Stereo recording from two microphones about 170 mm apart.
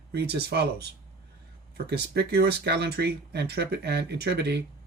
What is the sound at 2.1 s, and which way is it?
Speech, 70° right (ahead or behind).